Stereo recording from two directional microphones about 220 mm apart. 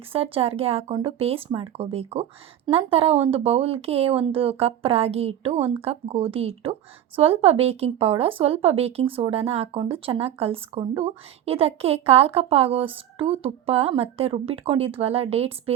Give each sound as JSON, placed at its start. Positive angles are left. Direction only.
{"t": 0.1, "sound": "speech", "side_deg": -25}